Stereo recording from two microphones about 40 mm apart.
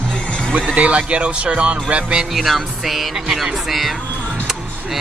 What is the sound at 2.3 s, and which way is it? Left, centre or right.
Speech, centre.